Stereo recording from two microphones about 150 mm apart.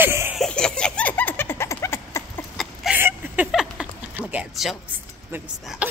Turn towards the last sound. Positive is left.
turn(degrees=0)  # may be behind; listen again after turning